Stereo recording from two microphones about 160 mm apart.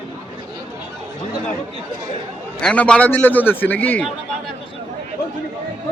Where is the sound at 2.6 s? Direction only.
5° left (ahead or behind).